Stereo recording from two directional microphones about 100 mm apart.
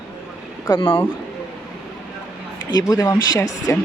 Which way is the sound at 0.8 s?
25° left (ahead or behind).